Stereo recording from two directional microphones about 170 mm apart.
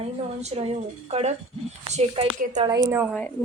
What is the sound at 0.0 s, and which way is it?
A woman's voice, 35° right (ahead or behind).